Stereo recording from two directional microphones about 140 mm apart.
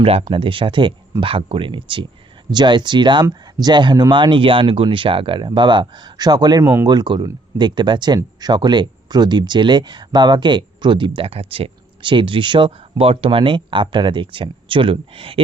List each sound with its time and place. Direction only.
0.0 s speech: 45° right (ahead or behind)